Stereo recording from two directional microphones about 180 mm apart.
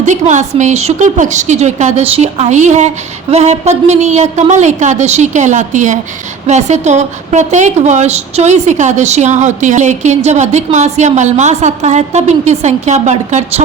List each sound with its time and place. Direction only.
0.0 s a woman's voice: 40° right (ahead or behind)